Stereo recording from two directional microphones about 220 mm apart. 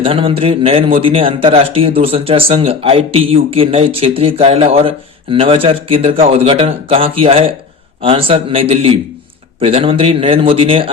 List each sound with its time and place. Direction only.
0.0 s a man's voice: 25° right (ahead or behind)